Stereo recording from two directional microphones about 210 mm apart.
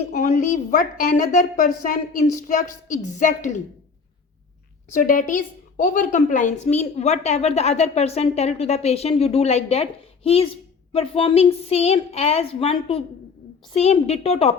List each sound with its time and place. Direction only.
0.0 s a woman's voice: 35° left (ahead or behind)
4.9 s a woman's voice: 40° left (ahead or behind)